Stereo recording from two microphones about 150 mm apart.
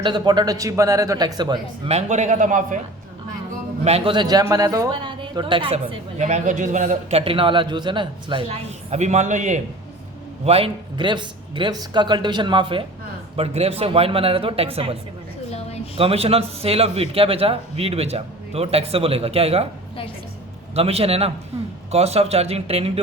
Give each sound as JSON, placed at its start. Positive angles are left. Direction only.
{"t": 0.0, "sound": "speech", "side_deg": -30}
{"t": 1.9, "sound": "a man's voice", "side_deg": -50}
{"t": 3.8, "sound": "speech", "side_deg": -40}
{"t": 4.9, "sound": "a woman's voice", "side_deg": -30}
{"t": 10.4, "sound": "a woman's voice", "side_deg": -40}
{"t": 15.4, "sound": "a sound", "side_deg": 45}
{"t": 16.0, "sound": "a woman's voice", "side_deg": -40}
{"t": 20.7, "sound": "a woman's voice", "side_deg": -40}